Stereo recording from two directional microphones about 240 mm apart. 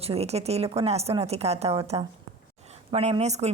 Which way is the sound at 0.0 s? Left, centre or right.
Right.